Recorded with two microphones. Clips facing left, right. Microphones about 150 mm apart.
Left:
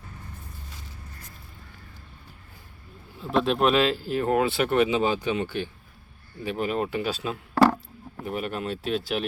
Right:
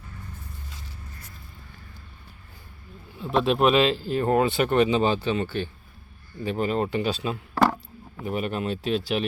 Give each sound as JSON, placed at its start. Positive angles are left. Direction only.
{"t": 3.2, "sound": "speech", "side_deg": 0}